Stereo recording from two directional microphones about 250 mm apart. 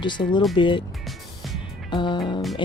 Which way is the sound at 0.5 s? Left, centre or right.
Centre.